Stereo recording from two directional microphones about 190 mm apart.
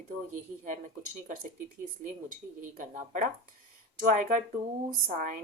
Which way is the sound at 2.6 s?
40° right (ahead or behind).